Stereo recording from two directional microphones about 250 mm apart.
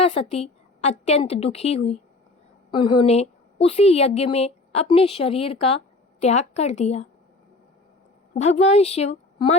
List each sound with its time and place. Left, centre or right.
0.0 s a woman's voice: left
8.4 s a woman's voice: left